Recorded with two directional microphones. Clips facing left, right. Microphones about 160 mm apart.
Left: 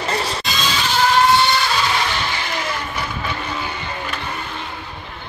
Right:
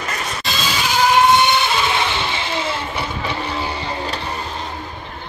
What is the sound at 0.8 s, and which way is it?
Vehicle, 10° right (ahead or behind).